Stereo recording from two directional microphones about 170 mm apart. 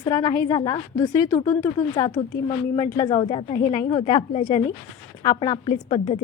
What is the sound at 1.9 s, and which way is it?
Speech, 35° left (ahead or behind).